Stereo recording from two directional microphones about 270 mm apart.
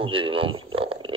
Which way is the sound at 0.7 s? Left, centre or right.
Centre.